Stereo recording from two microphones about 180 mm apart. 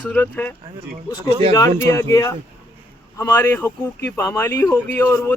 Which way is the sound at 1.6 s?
20° left (ahead or behind).